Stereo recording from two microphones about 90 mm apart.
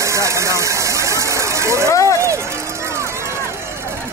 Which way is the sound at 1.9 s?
35° left (ahead or behind).